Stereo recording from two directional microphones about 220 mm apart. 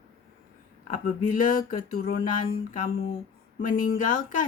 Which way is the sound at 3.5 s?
40° left (ahead or behind).